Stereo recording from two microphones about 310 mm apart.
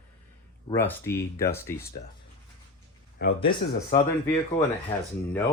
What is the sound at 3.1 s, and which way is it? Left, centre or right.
Speech, left.